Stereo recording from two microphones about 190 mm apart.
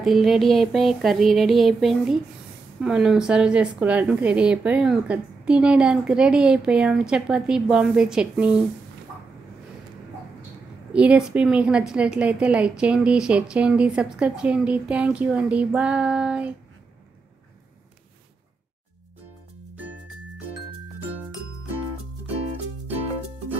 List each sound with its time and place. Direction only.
0.0 s a woman's voice: centre (ahead or behind)
10.9 s a woman's voice: 5° right (ahead or behind)